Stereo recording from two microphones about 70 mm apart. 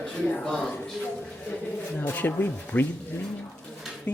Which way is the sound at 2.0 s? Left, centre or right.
Left.